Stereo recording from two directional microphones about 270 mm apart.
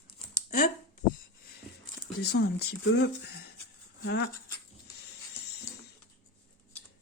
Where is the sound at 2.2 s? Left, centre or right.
Left.